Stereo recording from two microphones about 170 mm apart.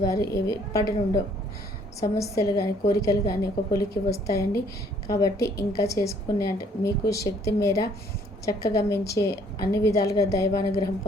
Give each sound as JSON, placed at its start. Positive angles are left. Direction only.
{"t": 0.0, "sound": "a woman's voice", "side_deg": 20}